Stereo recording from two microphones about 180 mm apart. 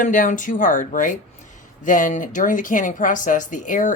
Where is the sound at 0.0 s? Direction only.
45° left (ahead or behind).